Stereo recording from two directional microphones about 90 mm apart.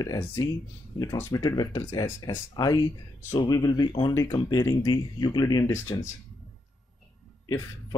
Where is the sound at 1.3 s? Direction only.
50° left (ahead or behind).